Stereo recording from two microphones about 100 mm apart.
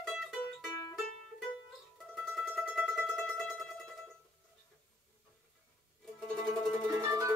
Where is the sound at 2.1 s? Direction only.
Centre (ahead or behind).